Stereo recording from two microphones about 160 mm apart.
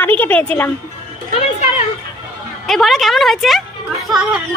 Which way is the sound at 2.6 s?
Centre (ahead or behind).